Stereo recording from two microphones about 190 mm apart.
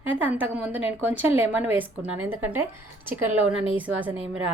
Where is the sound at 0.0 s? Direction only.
10° right (ahead or behind).